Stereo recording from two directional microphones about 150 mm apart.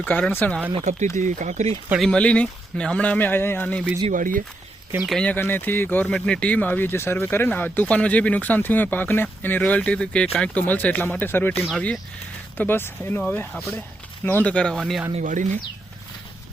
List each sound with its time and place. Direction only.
0.0 s speech: 10° left (ahead or behind)
1.1 s speech: 55° right (ahead or behind)
1.9 s speech: centre (ahead or behind)
4.1 s speech: 65° right (ahead or behind)
5.0 s speech: 5° left (ahead or behind)
15.1 s speech: 55° right (ahead or behind)